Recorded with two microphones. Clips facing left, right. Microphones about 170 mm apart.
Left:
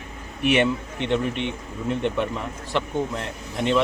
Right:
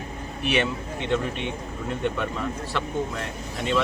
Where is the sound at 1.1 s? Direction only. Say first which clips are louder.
Left 2 dB; 20° left (ahead or behind).